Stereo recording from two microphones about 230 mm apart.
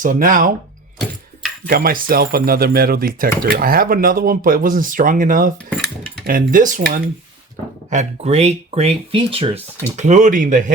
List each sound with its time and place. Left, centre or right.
0.0 s speech: right
1.6 s speech: right